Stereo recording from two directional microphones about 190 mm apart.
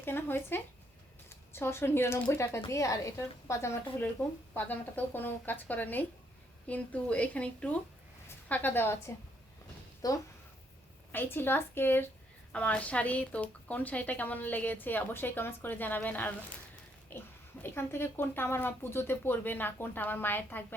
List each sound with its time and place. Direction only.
0.0 s a woman's voice: 10° left (ahead or behind)